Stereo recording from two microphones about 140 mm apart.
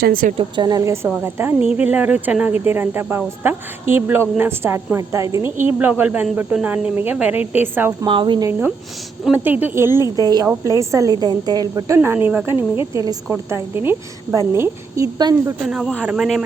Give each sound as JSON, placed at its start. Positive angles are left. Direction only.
{"t": 0.0, "sound": "a woman's voice", "side_deg": -90}
{"t": 0.3, "sound": "a woman's voice", "side_deg": -35}
{"t": 1.0, "sound": "speech", "side_deg": -15}
{"t": 8.0, "sound": "speech", "side_deg": -35}
{"t": 9.3, "sound": "speech", "side_deg": -10}
{"t": 10.2, "sound": "a woman's voice", "side_deg": -30}
{"t": 10.4, "sound": "a woman's voice", "side_deg": -15}
{"t": 11.9, "sound": "speech", "side_deg": -10}
{"t": 12.5, "sound": "a woman's voice", "side_deg": 40}
{"t": 12.9, "sound": "a woman's voice", "side_deg": -25}
{"t": 15.6, "sound": "a man's voice", "side_deg": -5}